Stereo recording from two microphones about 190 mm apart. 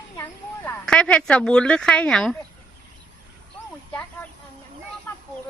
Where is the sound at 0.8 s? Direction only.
5° left (ahead or behind).